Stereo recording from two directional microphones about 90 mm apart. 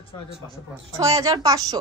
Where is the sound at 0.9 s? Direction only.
40° right (ahead or behind).